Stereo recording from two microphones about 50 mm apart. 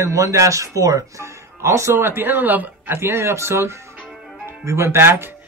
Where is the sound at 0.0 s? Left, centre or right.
Right.